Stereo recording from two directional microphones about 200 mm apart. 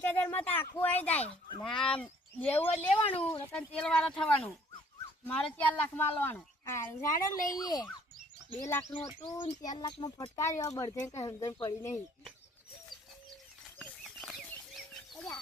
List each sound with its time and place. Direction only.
0.0 s a woman's voice: 10° left (ahead or behind)
1.2 s speech: 25° left (ahead or behind)
1.6 s a woman's voice: 5° left (ahead or behind)
13.7 s a sound: centre (ahead or behind)